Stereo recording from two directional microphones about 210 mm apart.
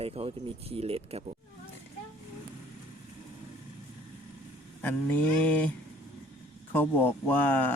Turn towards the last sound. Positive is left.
turn(degrees=10)  # may be behind; listen again after turning